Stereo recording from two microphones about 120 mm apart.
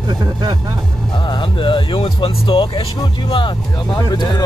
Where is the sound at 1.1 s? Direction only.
40° left (ahead or behind).